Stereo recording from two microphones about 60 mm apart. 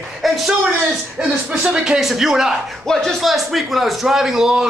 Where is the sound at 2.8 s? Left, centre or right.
Centre.